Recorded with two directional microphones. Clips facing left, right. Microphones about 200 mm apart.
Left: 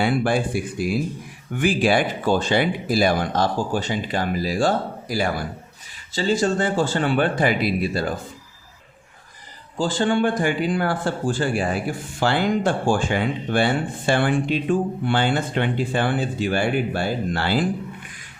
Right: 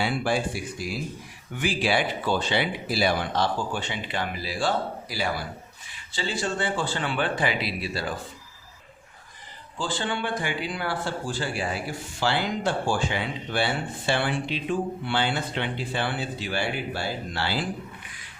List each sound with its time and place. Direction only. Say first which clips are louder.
0.0 s speech: left 5 dB; 55° left (ahead or behind)
9.7 s speech: left 9 dB; 45° left (ahead or behind)